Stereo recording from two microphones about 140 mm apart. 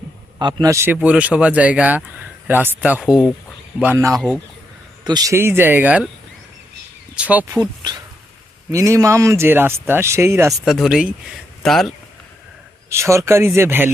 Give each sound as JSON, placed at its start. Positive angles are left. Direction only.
{"t": 0.3, "sound": "speech", "side_deg": -30}
{"t": 3.0, "sound": "speech", "side_deg": 0}
{"t": 3.9, "sound": "speech", "side_deg": -20}
{"t": 7.2, "sound": "speech", "side_deg": -10}
{"t": 7.5, "sound": "speech", "side_deg": -30}
{"t": 10.7, "sound": "speech", "side_deg": 0}
{"t": 12.9, "sound": "speech", "side_deg": -20}